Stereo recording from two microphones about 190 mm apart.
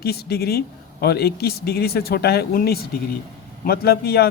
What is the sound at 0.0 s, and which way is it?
Speech, 55° left (ahead or behind).